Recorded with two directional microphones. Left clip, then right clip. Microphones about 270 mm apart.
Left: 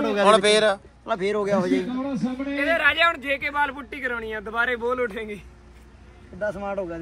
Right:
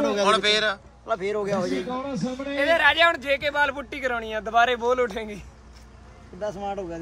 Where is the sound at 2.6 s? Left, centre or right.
Right.